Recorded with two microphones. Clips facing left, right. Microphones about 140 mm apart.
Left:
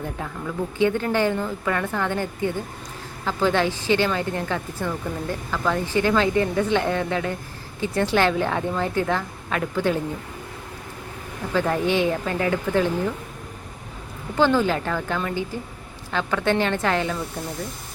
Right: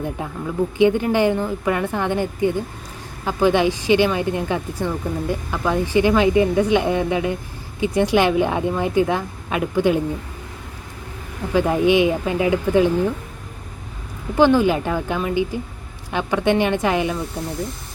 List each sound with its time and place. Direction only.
0.2 s speech: 15° right (ahead or behind)
11.5 s speech: 15° right (ahead or behind)
14.3 s speech: 15° right (ahead or behind)